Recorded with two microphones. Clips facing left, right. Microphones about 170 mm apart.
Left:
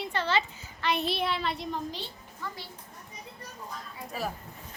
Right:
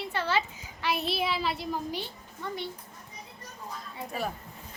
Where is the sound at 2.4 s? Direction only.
25° right (ahead or behind).